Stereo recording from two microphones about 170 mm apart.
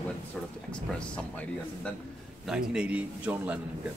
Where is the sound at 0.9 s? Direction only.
5° left (ahead or behind).